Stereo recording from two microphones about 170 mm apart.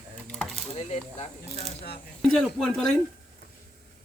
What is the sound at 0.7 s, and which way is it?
Speech, 40° left (ahead or behind).